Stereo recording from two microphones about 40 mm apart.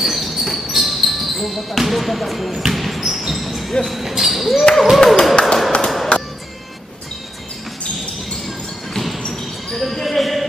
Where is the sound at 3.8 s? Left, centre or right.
Left.